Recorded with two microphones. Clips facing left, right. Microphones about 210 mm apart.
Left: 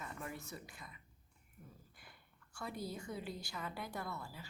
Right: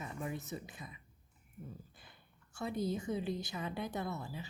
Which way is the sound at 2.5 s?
20° right (ahead or behind).